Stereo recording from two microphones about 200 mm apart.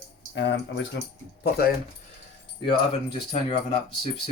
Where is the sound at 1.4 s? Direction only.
50° left (ahead or behind).